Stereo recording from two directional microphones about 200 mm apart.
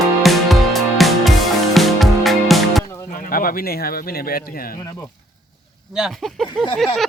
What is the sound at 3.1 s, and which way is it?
Speech, 45° left (ahead or behind).